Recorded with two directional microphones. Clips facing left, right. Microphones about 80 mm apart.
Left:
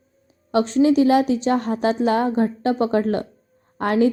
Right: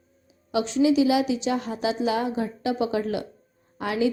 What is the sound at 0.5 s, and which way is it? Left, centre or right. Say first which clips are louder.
A woman's voice: left 4 dB; left.